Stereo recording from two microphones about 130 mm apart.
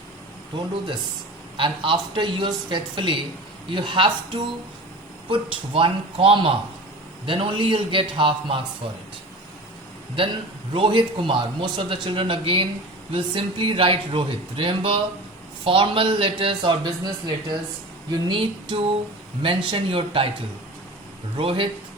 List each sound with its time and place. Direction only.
0.5 s speech: 35° right (ahead or behind)
10.8 s speech: 40° right (ahead or behind)
21.3 s speech: 40° right (ahead or behind)